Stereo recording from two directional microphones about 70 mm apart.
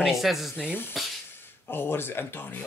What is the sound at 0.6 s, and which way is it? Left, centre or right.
Speech, left.